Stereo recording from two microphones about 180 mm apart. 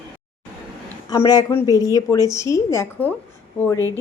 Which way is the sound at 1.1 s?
20° left (ahead or behind).